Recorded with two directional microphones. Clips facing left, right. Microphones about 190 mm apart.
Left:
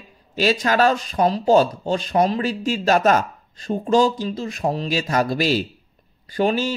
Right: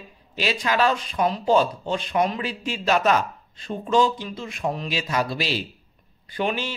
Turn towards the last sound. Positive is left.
turn(degrees=40)  # may be behind; listen again after turning